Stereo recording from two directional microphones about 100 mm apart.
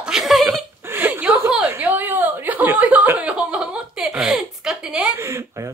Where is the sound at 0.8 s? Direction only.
20° right (ahead or behind).